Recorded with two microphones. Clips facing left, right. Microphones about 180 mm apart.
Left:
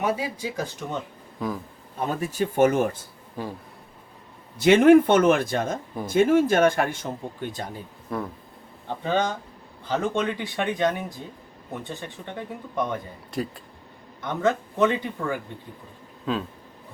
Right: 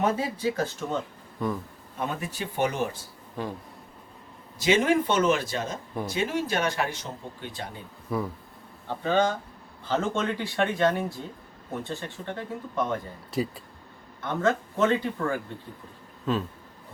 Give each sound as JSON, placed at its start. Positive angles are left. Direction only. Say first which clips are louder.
{"t": 0.0, "sound": "speech", "louder": "right 1 dB", "side_deg": 10}
{"t": 2.0, "sound": "speech", "louder": "left 8 dB", "side_deg": 40}
{"t": 4.5, "sound": "a man's voice", "louder": "left 8 dB", "side_deg": 60}
{"t": 8.1, "sound": "speech", "louder": "right 1 dB", "side_deg": -5}
{"t": 8.9, "sound": "speech", "louder": "right 1 dB", "side_deg": 15}
{"t": 13.3, "sound": "speech", "louder": "right 1 dB", "side_deg": 0}
{"t": 14.2, "sound": "speech", "louder": "left 1 dB", "side_deg": 15}
{"t": 16.3, "sound": "speech", "louder": "even", "side_deg": 0}